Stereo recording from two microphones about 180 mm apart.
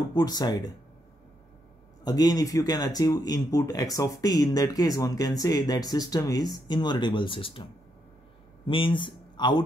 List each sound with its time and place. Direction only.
0.1 s speech: 25° left (ahead or behind)
2.0 s speech: 20° left (ahead or behind)
8.6 s speech: 30° left (ahead or behind)